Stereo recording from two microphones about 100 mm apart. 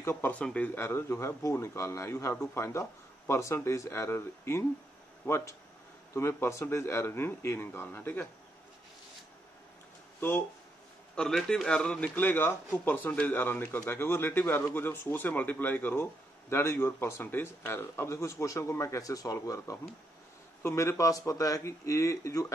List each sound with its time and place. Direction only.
0.0 s speech: 20° left (ahead or behind)
11.1 s a man's voice: 5° left (ahead or behind); by 22.5 s 30° left (ahead or behind)